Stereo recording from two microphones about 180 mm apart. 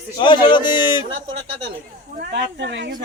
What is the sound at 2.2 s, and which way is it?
Speech, 75° right (ahead or behind).